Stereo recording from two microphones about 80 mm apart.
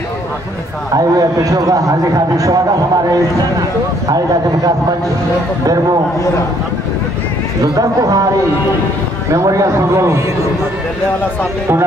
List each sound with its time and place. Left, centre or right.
0.9 s a man's voice: right
7.6 s a man's voice: right
9.3 s a man's voice: right